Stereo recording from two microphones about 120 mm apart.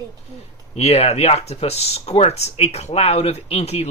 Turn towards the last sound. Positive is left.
turn(degrees=60)  # may be behind; listen again after turning